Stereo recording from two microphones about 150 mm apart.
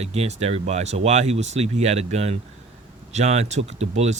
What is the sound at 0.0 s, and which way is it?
Speech, 45° right (ahead or behind).